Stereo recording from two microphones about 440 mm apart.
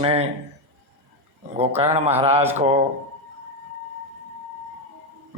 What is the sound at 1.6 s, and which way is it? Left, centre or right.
Speech, centre.